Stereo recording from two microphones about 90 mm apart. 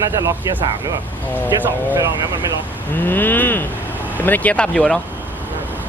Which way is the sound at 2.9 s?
20° left (ahead or behind).